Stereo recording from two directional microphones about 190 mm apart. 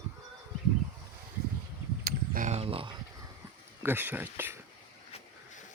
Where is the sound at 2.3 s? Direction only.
40° right (ahead or behind).